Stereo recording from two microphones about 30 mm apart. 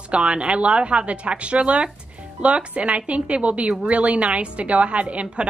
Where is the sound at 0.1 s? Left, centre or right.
Right.